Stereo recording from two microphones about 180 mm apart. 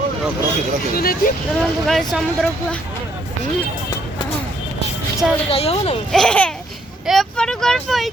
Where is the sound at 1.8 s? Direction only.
Centre (ahead or behind).